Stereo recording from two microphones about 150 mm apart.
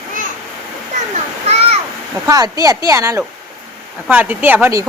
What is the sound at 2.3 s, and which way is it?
Speech, 25° right (ahead or behind).